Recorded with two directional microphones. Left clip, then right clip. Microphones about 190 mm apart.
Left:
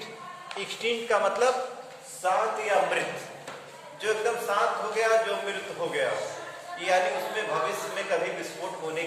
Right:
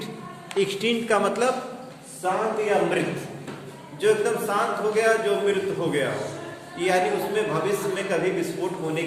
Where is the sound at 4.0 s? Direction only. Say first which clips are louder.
Right 6 dB; 15° right (ahead or behind).